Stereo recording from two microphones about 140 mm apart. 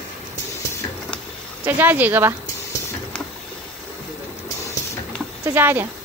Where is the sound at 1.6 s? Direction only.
15° right (ahead or behind).